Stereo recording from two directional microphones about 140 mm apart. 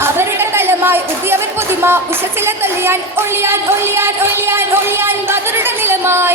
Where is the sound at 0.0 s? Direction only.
15° right (ahead or behind).